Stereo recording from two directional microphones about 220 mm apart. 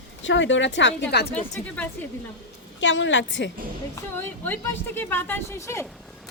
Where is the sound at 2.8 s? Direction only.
55° left (ahead or behind).